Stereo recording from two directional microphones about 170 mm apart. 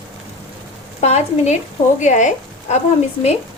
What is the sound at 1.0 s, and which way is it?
A woman's voice, 40° left (ahead or behind).